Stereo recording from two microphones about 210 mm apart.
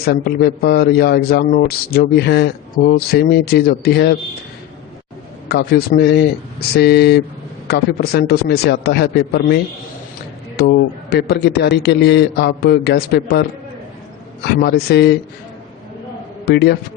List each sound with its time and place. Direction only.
0.0 s a man's voice: 50° left (ahead or behind)
5.5 s a man's voice: 50° left (ahead or behind)
10.6 s a man's voice: 50° left (ahead or behind)
14.4 s a man's voice: 50° left (ahead or behind)
16.5 s a man's voice: 50° left (ahead or behind)